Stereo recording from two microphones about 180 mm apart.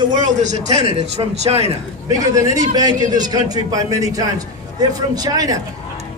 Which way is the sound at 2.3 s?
20° right (ahead or behind).